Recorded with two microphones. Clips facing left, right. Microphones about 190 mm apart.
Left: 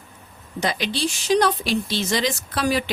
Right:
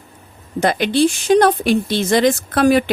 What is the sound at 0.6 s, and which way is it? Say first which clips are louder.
Speech: right 9 dB; 55° right (ahead or behind).